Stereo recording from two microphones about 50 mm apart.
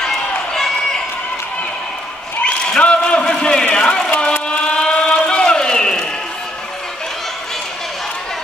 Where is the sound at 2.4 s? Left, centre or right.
Centre.